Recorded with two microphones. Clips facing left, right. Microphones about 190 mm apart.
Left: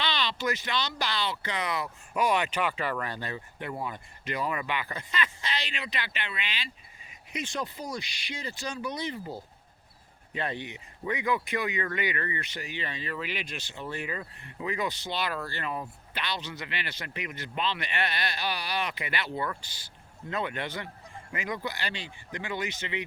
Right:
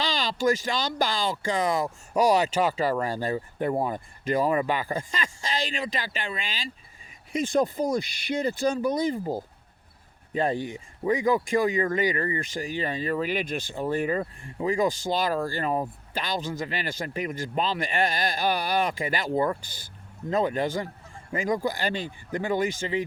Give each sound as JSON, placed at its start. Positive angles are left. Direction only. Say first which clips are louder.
{"t": 0.0, "sound": "speech", "louder": "right 5 dB", "side_deg": -45}